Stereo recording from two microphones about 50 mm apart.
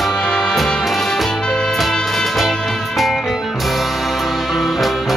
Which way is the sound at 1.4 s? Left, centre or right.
Centre.